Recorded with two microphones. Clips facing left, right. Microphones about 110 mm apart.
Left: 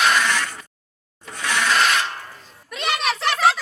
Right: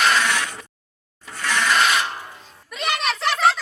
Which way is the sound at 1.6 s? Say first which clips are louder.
Even; centre (ahead or behind).